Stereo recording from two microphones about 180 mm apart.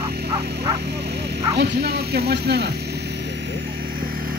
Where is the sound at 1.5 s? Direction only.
70° right (ahead or behind).